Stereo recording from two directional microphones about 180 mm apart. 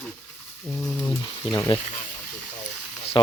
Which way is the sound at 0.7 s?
5° left (ahead or behind).